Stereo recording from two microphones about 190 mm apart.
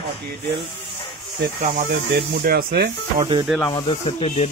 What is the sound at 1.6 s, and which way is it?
Speech, 50° right (ahead or behind).